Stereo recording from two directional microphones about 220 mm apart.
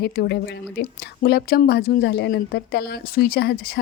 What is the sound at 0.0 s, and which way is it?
A woman's voice, 50° left (ahead or behind).